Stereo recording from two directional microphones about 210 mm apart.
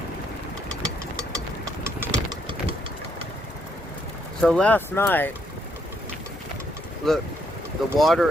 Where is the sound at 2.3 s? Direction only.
25° right (ahead or behind).